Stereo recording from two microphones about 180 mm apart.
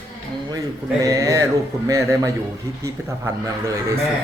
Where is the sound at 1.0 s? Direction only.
20° right (ahead or behind).